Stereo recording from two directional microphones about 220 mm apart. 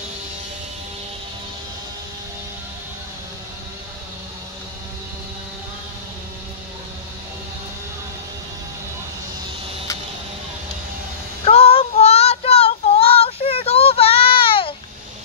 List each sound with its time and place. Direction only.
11.4 s child singing: 25° left (ahead or behind)